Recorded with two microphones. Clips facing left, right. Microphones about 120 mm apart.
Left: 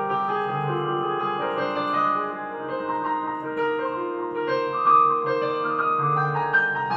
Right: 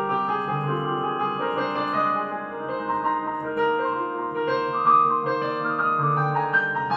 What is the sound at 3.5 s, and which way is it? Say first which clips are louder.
Music: right 2 dB; 20° right (ahead or behind).